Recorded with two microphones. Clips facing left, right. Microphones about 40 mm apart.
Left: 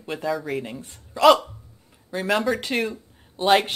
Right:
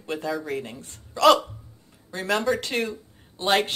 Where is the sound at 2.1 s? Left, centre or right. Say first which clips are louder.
Left 1 dB; centre.